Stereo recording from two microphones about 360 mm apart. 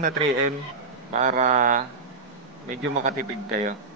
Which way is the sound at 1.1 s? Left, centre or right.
Centre.